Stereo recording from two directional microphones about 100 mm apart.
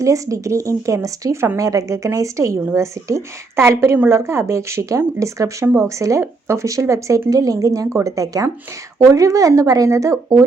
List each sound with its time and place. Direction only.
0.0 s speech: 35° right (ahead or behind)